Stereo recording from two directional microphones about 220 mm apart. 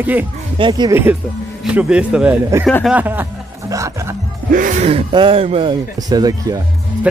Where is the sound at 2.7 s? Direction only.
5° left (ahead or behind).